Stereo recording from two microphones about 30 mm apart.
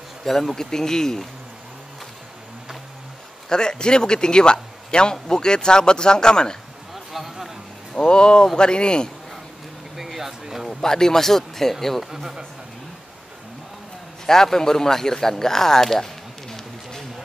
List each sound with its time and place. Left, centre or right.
0.2 s speech: centre
3.4 s speech: left
6.9 s a sound: centre
7.9 s speech: left
9.9 s a sound: centre
10.7 s speech: left
14.2 s speech: centre